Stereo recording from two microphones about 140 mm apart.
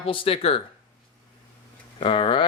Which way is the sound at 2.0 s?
40° left (ahead or behind).